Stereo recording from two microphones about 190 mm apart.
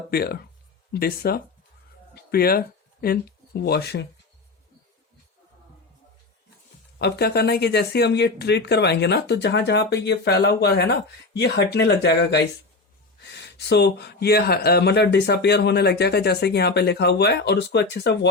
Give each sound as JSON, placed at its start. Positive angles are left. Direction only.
{"t": 0.1, "sound": "speech", "side_deg": 55}
{"t": 7.0, "sound": "speech", "side_deg": 55}